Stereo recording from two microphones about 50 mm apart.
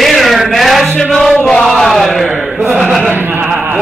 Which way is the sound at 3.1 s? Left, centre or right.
Right.